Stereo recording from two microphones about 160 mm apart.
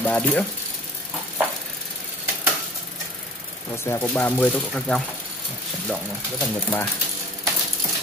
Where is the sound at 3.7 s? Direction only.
15° left (ahead or behind).